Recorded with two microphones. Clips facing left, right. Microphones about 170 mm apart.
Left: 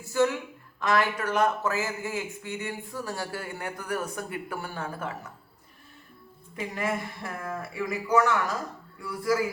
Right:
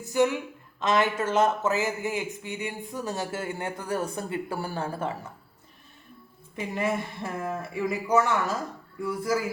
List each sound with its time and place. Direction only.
0.0 s speech: 15° right (ahead or behind)
6.7 s speech: 20° right (ahead or behind)